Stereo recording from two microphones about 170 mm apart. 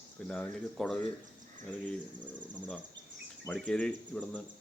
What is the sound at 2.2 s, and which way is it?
Speech, 25° right (ahead or behind).